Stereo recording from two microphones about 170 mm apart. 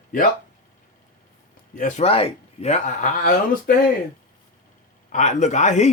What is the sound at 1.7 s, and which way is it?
Speech, 45° left (ahead or behind).